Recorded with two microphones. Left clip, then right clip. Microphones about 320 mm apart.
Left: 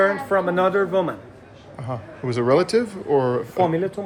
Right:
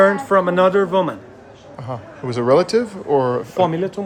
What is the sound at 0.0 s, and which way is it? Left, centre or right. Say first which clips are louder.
Speech: right 5 dB; right.